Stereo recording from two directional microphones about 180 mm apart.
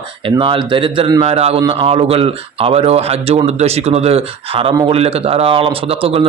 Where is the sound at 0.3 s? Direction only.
25° right (ahead or behind).